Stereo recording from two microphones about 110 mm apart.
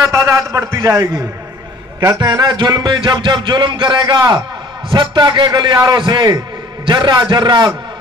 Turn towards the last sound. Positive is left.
turn(degrees=-45)  # may be behind; listen again after turning